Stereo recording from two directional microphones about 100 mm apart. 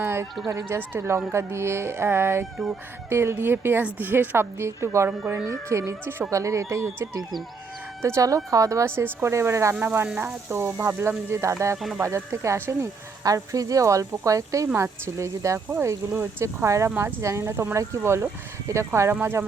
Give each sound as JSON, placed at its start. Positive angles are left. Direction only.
{"t": 0.0, "sound": "a woman's voice", "side_deg": -25}